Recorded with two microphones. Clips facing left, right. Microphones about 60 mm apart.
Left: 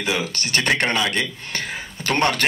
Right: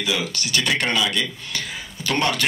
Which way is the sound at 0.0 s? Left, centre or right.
Left.